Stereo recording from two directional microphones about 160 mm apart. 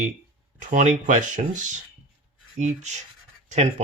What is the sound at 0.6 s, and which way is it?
Speech, 50° right (ahead or behind).